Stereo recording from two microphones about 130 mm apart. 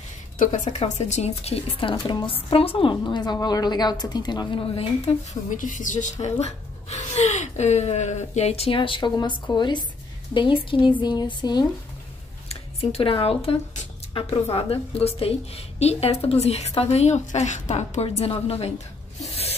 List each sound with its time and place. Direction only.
0.8 s a woman's voice: 60° left (ahead or behind); by 5.1 s 45° left (ahead or behind)
5.6 s a woman's voice: 85° left; by 11.6 s 30° left (ahead or behind)
12.4 s a woman's voice: 50° left (ahead or behind)